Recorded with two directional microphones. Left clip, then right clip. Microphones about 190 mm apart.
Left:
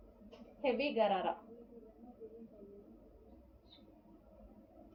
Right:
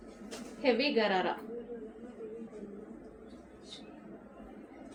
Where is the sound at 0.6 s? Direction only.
20° right (ahead or behind).